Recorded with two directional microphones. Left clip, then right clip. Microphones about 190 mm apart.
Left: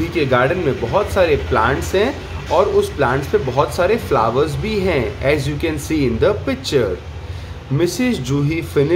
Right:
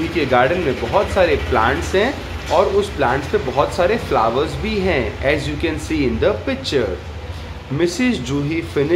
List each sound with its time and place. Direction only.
0.2 s speech: 25° left (ahead or behind)